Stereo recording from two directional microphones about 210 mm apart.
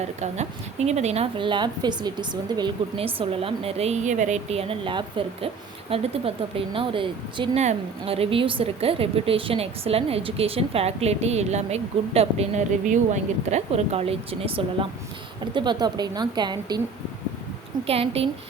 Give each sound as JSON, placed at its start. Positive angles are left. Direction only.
{"t": 0.2, "sound": "speech", "side_deg": -30}
{"t": 17.8, "sound": "speech", "side_deg": -30}